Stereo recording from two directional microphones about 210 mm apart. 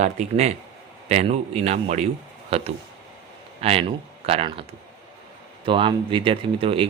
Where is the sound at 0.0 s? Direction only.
30° right (ahead or behind).